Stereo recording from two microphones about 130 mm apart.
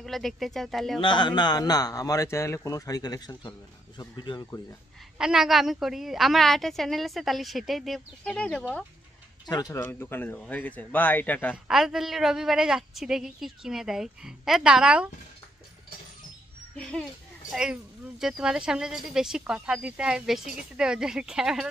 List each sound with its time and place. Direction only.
0.0 s a woman's voice: centre (ahead or behind)
1.0 s a man's voice: 35° left (ahead or behind)
5.2 s a woman's voice: 5° right (ahead or behind)
9.5 s speech: 30° left (ahead or behind); by 11.5 s 15° left (ahead or behind)
11.5 s a woman's voice: 5° right (ahead or behind)
16.7 s speech: 5° left (ahead or behind)
17.5 s a woman's voice: 5° right (ahead or behind)